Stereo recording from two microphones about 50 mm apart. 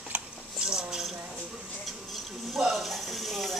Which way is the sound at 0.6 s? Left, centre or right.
Centre.